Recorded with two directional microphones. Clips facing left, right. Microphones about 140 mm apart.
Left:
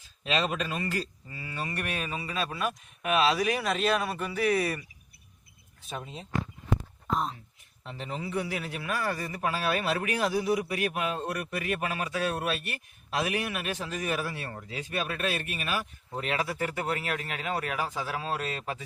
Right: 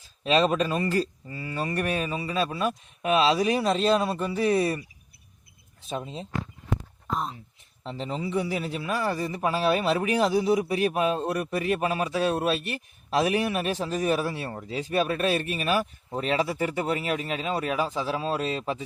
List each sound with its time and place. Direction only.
0.3 s speech: 35° right (ahead or behind)
5.9 s speech: 30° right (ahead or behind)
7.1 s speech: centre (ahead or behind)
7.9 s speech: 30° right (ahead or behind)